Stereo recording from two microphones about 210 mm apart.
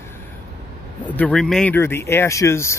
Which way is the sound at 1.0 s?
5° left (ahead or behind).